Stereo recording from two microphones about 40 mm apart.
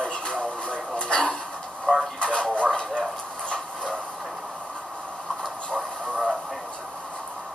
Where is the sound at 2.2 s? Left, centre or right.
Left.